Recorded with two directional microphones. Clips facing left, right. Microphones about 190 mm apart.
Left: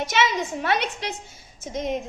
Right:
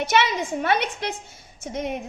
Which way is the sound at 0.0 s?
60° right (ahead or behind).